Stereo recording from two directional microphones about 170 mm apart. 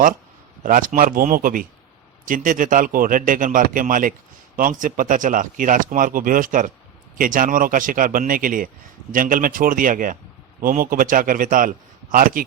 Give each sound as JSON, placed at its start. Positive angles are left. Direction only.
{"t": 0.6, "sound": "a man's voice", "side_deg": -50}